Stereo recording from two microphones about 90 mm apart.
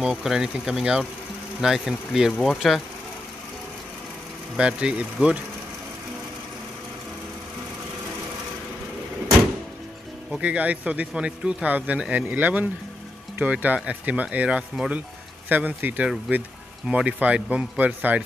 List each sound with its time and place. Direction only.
0.0 s speech: 5° right (ahead or behind)
4.6 s speech: 10° right (ahead or behind)
10.4 s speech: 15° right (ahead or behind)